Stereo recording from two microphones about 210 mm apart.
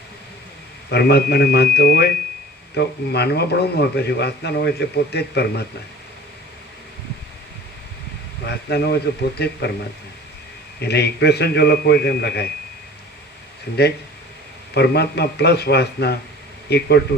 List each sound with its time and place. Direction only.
0.9 s a man's voice: 50° left (ahead or behind)
8.4 s a man's voice: 50° left (ahead or behind)
10.8 s a man's voice: 50° left (ahead or behind)
14.7 s a man's voice: 50° left (ahead or behind)